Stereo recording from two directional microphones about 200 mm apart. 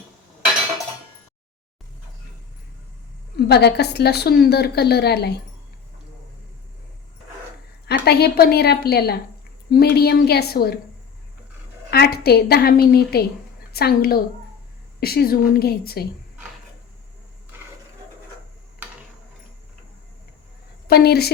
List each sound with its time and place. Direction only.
3.4 s a woman's voice: 55° left (ahead or behind)
7.9 s a woman's voice: 55° left (ahead or behind)
11.9 s a woman's voice: 50° left (ahead or behind)
17.5 s a sound: 10° right (ahead or behind)
20.8 s a woman's voice: 50° left (ahead or behind)